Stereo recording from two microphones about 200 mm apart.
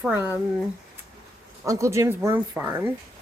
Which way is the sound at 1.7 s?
15° right (ahead or behind).